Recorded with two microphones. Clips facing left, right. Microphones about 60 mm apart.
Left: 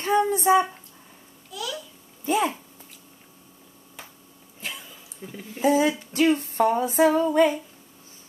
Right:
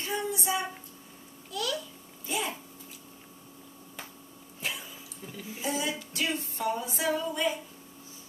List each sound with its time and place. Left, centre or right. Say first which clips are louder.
0.0 s a sound: left 11 dB; left
1.5 s a child's voice: even; centre
2.2 s speech: left 10 dB; left
4.6 s cough: even; centre
5.2 s music: left 12 dB; left